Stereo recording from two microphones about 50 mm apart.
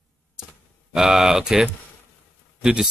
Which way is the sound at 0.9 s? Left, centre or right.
Centre.